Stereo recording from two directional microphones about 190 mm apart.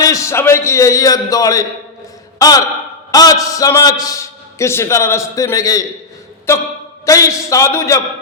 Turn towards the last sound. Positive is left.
turn(degrees=15)  # may be behind; listen again after turning